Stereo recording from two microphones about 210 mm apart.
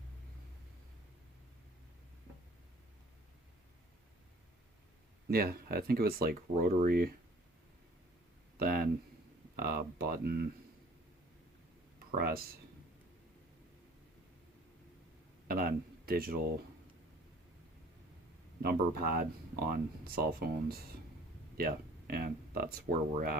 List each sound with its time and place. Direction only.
5.3 s speech: 45° right (ahead or behind)
8.5 s speech: 45° right (ahead or behind)
12.1 s speech: 45° right (ahead or behind)
15.4 s speech: 45° right (ahead or behind)
18.6 s speech: 45° right (ahead or behind)
21.6 s speech: 45° right (ahead or behind)